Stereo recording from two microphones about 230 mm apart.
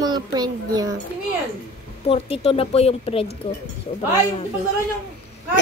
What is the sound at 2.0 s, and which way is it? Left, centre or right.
A woman's voice, left.